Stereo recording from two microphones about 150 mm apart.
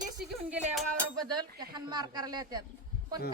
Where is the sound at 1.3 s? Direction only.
30° right (ahead or behind).